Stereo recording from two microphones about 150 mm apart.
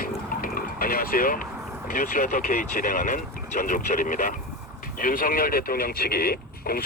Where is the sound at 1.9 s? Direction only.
60° left (ahead or behind).